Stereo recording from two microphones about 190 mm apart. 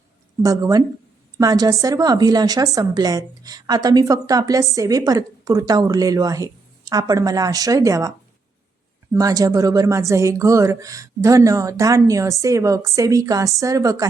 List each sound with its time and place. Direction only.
0.4 s a woman's voice: 20° right (ahead or behind)
9.1 s speech: 20° right (ahead or behind)